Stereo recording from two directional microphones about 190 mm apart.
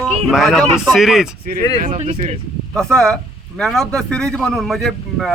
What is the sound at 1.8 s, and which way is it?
Speech, 40° right (ahead or behind).